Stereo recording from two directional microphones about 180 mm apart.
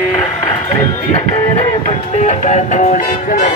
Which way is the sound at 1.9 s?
40° left (ahead or behind).